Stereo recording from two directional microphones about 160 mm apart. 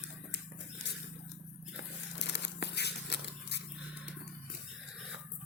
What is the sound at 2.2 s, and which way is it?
Tearing, 90° left.